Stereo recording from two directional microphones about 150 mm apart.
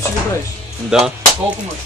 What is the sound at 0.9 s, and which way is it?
Speech, centre (ahead or behind).